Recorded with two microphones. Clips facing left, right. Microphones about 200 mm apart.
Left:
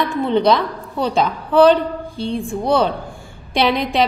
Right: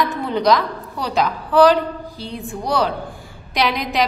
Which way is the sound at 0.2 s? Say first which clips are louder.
Left 4 dB; 25° left (ahead or behind).